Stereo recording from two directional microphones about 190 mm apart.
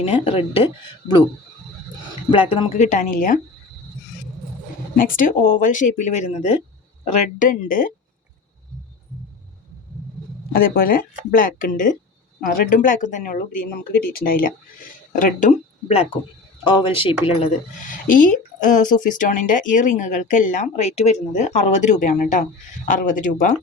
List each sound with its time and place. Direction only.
0.0 s speech: 30° left (ahead or behind)
2.3 s speech: 25° left (ahead or behind); by 3.3 s 45° left (ahead or behind)
4.9 s speech: 45° left (ahead or behind)
10.5 s speech: 50° left (ahead or behind)
16.6 s speech: 25° left (ahead or behind)
17.8 s speech: 45° left (ahead or behind)